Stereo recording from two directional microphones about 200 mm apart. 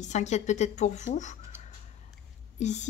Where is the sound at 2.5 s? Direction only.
35° left (ahead or behind).